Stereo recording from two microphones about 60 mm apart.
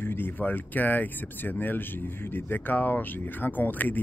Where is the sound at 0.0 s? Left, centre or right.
Left.